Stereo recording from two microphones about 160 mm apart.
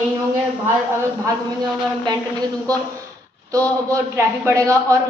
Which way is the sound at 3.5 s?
20° right (ahead or behind).